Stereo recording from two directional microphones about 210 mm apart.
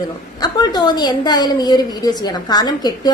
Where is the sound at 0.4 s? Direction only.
20° left (ahead or behind).